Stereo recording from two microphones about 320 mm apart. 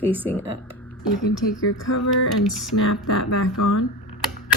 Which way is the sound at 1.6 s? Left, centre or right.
Left.